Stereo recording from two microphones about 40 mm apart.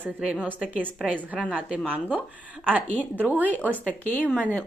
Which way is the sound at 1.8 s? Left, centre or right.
Right.